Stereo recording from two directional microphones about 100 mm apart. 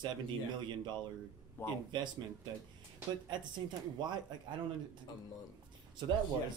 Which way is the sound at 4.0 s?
50° right (ahead or behind).